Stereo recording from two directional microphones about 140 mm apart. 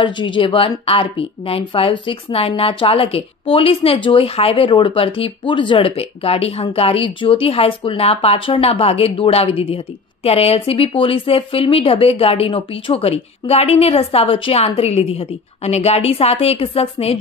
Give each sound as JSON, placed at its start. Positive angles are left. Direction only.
{"t": 0.0, "sound": "speech", "side_deg": 35}